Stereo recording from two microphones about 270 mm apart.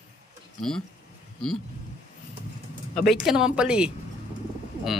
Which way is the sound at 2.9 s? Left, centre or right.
Centre.